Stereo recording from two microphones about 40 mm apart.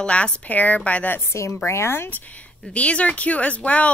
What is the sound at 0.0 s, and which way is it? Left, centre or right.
Speech, left.